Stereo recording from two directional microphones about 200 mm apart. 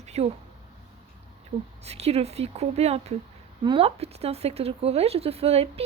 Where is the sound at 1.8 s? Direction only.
30° right (ahead or behind).